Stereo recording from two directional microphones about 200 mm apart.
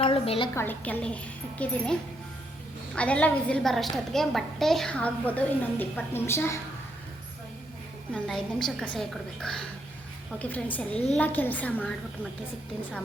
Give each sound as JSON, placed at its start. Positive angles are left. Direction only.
{"t": 0.0, "sound": "a woman's voice", "side_deg": 30}
{"t": 0.5, "sound": "a woman's voice", "side_deg": 10}
{"t": 8.1, "sound": "a woman's voice", "side_deg": 0}